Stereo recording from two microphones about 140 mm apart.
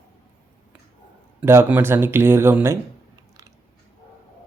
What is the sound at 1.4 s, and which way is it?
Speech, 15° right (ahead or behind).